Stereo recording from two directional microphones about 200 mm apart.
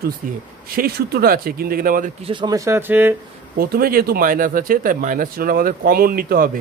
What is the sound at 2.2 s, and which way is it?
Speech, 25° right (ahead or behind).